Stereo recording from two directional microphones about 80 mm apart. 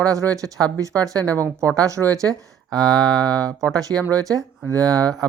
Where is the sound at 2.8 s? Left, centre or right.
Right.